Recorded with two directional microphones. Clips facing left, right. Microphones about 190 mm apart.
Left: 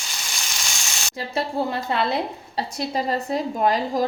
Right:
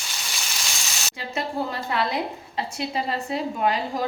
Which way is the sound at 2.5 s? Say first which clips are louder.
Left 2 dB; 35° left (ahead or behind).